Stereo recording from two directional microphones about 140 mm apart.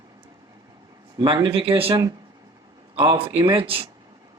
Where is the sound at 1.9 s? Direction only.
25° right (ahead or behind).